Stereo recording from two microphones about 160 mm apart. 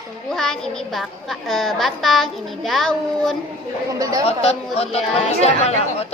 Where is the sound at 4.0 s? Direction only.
20° right (ahead or behind).